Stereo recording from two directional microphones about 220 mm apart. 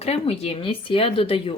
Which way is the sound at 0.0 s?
25° left (ahead or behind).